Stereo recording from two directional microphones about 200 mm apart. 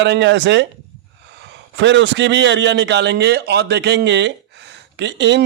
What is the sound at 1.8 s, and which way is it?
Speech, 60° right (ahead or behind).